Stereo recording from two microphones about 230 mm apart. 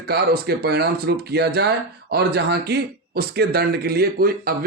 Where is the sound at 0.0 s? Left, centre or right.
Right.